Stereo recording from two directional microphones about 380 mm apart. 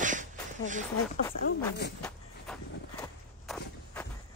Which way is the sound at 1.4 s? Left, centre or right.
Left.